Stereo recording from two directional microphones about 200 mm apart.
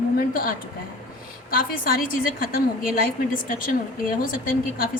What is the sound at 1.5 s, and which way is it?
Speech, 45° left (ahead or behind).